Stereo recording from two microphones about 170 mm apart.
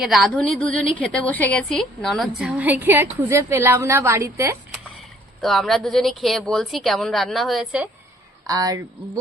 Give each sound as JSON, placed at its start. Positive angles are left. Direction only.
{"t": 0.0, "sound": "a woman's voice", "side_deg": 0}
{"t": 5.4, "sound": "a woman's voice", "side_deg": 0}
{"t": 8.4, "sound": "speech", "side_deg": -20}